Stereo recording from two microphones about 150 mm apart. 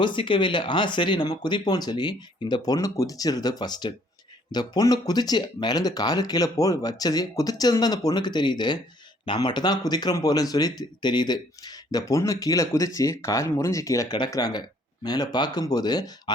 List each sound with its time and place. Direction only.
0.0 s speech: 35° left (ahead or behind)